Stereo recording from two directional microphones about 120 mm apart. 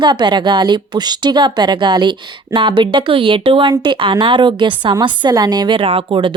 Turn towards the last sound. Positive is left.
turn(degrees=-45)  # may be behind; listen again after turning